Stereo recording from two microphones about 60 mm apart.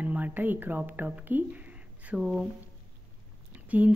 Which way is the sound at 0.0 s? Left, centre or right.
Right.